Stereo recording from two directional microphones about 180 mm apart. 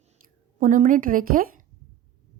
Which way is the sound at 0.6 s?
45° right (ahead or behind).